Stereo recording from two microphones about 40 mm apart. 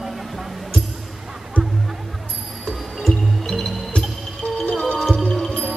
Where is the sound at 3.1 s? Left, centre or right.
Centre.